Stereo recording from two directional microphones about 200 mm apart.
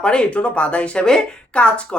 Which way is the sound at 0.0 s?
5° left (ahead or behind).